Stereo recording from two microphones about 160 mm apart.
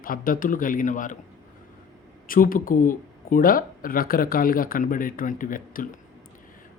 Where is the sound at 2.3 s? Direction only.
60° left (ahead or behind).